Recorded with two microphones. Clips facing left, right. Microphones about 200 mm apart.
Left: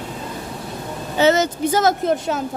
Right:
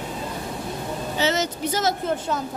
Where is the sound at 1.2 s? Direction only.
55° left (ahead or behind).